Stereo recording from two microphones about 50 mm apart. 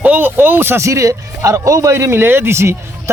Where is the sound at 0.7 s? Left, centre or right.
Right.